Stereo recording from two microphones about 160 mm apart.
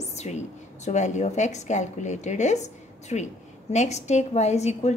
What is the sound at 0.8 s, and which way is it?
A woman's voice, 45° left (ahead or behind).